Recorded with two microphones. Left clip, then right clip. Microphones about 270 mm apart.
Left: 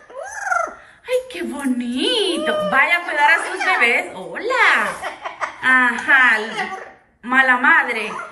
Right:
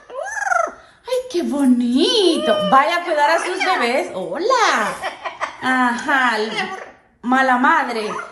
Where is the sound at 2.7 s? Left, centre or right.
Centre.